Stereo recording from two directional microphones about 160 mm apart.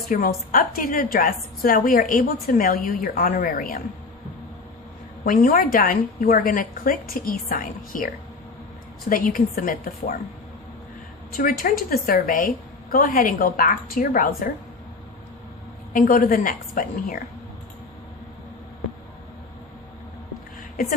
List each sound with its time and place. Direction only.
0.1 s a woman's voice: 60° left (ahead or behind)
5.2 s a woman's voice: 60° left (ahead or behind)
11.3 s a woman's voice: 65° left (ahead or behind)
15.9 s a woman's voice: 60° left (ahead or behind)